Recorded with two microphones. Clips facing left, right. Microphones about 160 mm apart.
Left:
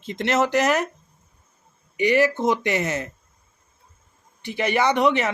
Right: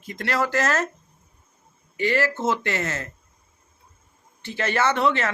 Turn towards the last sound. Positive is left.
turn(degrees=15)  # may be behind; listen again after turning